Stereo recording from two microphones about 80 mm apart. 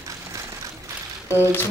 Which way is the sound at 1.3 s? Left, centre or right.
Right.